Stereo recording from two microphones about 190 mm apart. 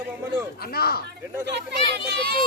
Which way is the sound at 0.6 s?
55° left (ahead or behind).